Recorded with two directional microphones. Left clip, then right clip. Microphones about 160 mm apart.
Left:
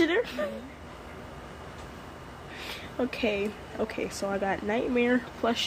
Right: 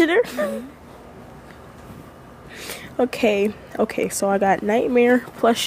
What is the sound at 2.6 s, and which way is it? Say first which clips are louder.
Speech: right 10 dB; 40° right (ahead or behind).